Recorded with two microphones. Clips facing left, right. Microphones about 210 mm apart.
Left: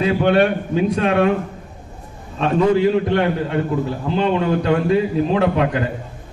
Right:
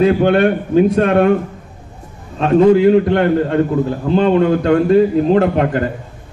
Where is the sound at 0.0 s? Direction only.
55° right (ahead or behind).